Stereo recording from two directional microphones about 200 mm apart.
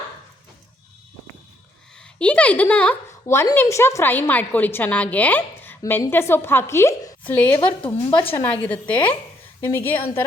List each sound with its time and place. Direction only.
2.1 s speech: 5° left (ahead or behind)
8.1 s a woman's voice: 25° left (ahead or behind)
8.6 s a woman's voice: 5° left (ahead or behind)